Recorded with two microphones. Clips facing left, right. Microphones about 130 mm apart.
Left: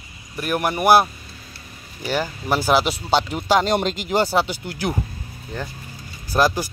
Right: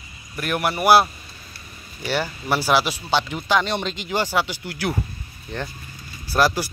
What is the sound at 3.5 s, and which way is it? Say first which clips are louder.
Speech: left 4 dB; 40° left (ahead or behind).